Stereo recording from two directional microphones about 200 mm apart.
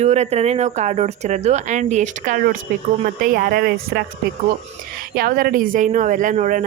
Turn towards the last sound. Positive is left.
turn(degrees=-40)  # may be behind; listen again after turning